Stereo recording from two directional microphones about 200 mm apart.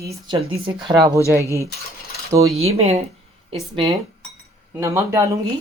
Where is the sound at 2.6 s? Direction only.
30° right (ahead or behind).